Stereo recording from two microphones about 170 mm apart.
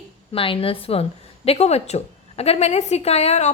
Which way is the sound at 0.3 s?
30° left (ahead or behind).